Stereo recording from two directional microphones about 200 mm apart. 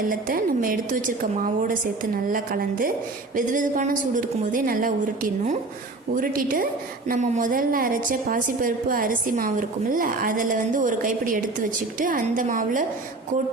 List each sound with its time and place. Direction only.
0.1 s a woman's voice: 45° right (ahead or behind)
2.3 s a woman's voice: 45° right (ahead or behind)